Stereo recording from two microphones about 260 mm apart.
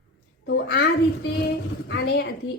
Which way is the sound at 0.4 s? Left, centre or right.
Left.